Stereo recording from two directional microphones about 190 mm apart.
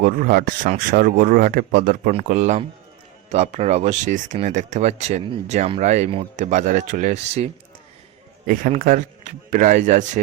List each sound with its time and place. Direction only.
0.0 s speech: 50° right (ahead or behind)
8.4 s speech: 45° right (ahead or behind)